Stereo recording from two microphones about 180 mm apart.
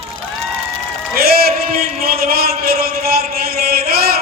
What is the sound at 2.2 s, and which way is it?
A man's voice, 55° right (ahead or behind).